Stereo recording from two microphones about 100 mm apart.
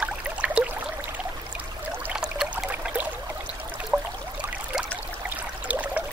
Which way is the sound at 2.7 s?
15° right (ahead or behind).